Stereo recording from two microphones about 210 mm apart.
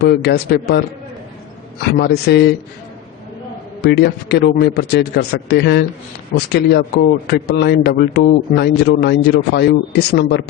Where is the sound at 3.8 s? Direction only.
50° left (ahead or behind).